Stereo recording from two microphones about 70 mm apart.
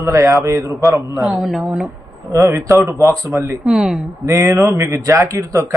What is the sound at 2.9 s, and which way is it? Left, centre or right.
Speech, right.